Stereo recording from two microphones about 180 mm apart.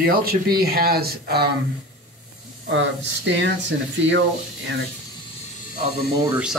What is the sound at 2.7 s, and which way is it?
Speech, 90° right.